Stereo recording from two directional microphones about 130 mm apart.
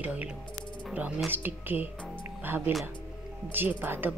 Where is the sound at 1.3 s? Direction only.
15° right (ahead or behind).